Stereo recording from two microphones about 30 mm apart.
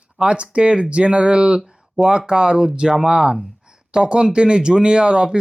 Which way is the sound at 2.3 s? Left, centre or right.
Right.